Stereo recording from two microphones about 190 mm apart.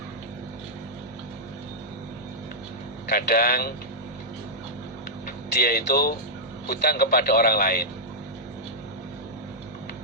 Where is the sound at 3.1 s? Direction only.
55° left (ahead or behind).